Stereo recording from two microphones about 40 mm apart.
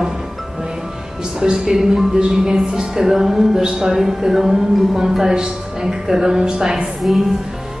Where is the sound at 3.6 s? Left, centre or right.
Centre.